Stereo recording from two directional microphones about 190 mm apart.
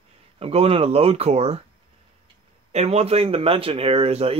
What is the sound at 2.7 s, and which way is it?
A man's voice, 35° right (ahead or behind).